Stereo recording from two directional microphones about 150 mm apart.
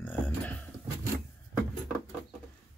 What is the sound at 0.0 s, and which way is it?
Beatboxing, 10° left (ahead or behind).